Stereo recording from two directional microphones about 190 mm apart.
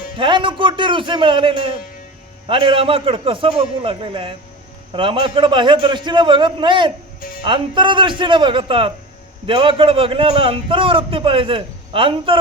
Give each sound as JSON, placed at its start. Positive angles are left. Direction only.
{"t": 0.2, "sound": "a man's voice", "side_deg": -25}
{"t": 7.2, "sound": "music", "side_deg": 50}
{"t": 7.4, "sound": "a man's voice", "side_deg": -25}